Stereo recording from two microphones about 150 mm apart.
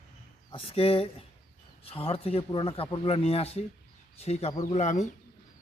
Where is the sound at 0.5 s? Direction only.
40° left (ahead or behind).